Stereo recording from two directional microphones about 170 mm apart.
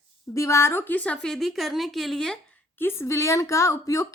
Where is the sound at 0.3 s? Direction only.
15° left (ahead or behind).